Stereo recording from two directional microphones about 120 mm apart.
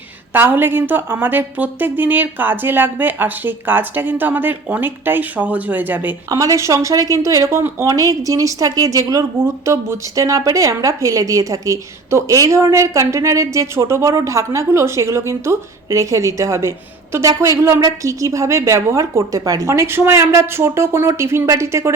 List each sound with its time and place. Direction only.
0.3 s a woman's voice: 15° right (ahead or behind)
6.2 s speech: 30° right (ahead or behind)